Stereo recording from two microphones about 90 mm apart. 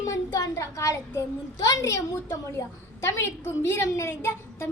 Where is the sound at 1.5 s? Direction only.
45° left (ahead or behind).